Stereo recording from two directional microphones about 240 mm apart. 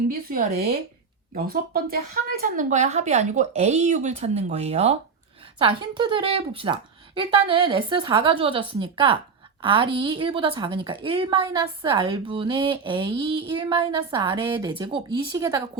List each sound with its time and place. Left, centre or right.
0.1 s speech: right
2.4 s a woman's voice: right; by 15.6 s centre